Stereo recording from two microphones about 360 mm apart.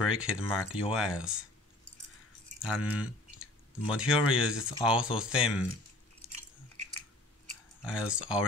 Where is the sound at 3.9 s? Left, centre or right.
Centre.